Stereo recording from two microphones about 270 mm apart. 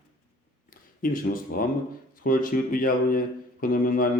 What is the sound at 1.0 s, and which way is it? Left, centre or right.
A man's voice, left.